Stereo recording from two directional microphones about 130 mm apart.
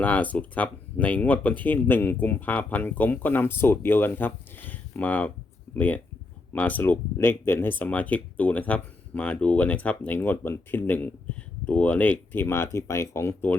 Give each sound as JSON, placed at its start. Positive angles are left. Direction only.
{"t": 0.0, "sound": "speech", "side_deg": 10}